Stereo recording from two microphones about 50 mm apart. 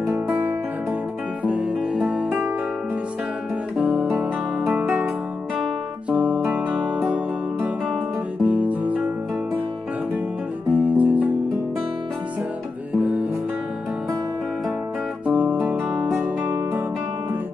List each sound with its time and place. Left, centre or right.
1.4 s music: right
3.7 s guitar: right
6.0 s music: right
8.5 s music: right
10.7 s music: right
15.2 s music: right